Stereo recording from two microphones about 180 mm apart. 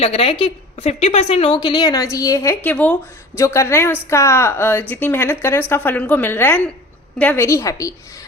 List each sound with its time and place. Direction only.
0.0 s a woman's voice: 35° left (ahead or behind); by 7.9 s 20° left (ahead or behind)